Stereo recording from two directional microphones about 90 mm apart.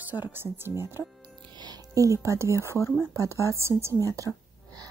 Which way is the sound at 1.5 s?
55° right (ahead or behind).